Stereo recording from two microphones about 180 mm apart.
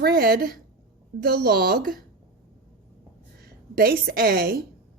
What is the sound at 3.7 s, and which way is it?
Speech, 55° right (ahead or behind).